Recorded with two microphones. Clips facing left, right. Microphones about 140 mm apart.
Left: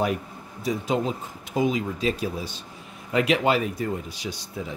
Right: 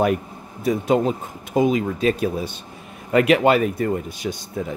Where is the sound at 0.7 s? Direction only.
55° right (ahead or behind).